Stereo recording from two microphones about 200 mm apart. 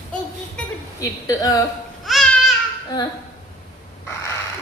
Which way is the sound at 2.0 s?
Centre (ahead or behind).